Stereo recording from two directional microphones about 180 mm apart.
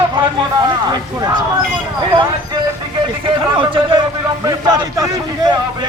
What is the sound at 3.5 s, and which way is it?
A man's voice, 25° right (ahead or behind).